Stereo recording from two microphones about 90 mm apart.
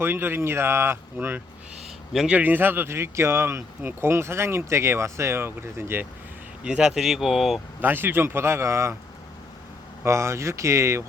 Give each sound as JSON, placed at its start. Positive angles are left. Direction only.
{"t": 0.0, "sound": "speech", "side_deg": -25}
{"t": 6.7, "sound": "speech", "side_deg": -10}
{"t": 7.8, "sound": "speech", "side_deg": -25}
{"t": 10.0, "sound": "speech", "side_deg": -30}